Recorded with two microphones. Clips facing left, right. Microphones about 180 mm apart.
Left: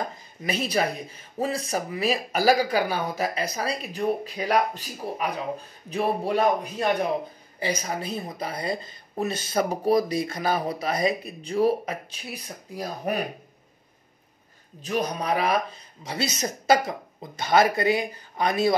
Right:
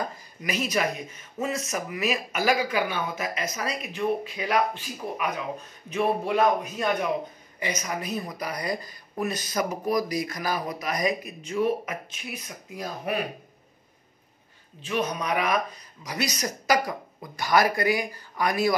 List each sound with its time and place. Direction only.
0.4 s speech: 30° left (ahead or behind)
14.8 s speech: 40° left (ahead or behind)